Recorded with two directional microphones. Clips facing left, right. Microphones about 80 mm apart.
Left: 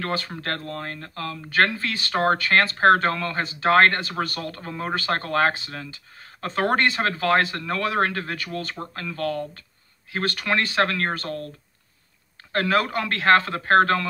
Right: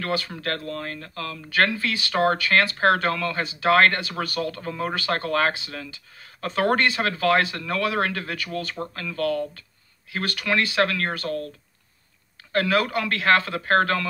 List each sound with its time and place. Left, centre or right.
0.0 s speech: left
12.5 s a man's voice: left